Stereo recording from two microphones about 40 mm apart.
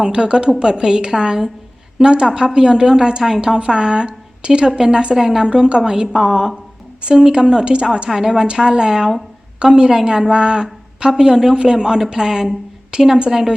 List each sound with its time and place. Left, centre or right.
0.0 s a woman's voice: right
5.5 s a woman's voice: right
7.0 s a woman's voice: right
8.1 s a woman's voice: centre